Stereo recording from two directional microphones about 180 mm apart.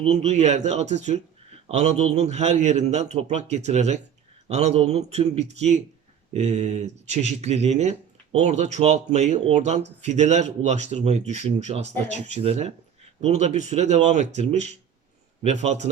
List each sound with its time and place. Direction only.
0.0 s speech: 35° right (ahead or behind)